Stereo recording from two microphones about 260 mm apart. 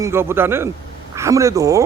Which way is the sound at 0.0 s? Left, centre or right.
Centre.